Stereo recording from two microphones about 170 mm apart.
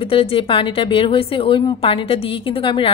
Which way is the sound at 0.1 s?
35° left (ahead or behind).